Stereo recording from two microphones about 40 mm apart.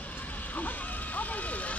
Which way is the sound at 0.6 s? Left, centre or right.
Left.